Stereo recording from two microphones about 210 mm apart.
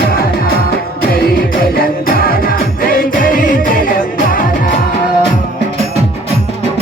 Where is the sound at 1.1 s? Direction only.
45° left (ahead or behind).